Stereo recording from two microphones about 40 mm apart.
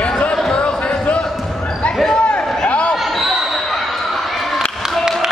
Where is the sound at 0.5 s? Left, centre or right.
Left.